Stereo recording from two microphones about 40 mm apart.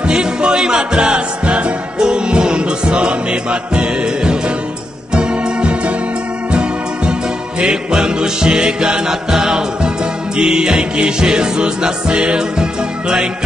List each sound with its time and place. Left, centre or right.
0.0 s music: right
5.1 s organ: right
6.5 s music: right